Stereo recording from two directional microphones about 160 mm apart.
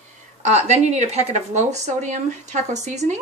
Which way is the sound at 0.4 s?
45° right (ahead or behind).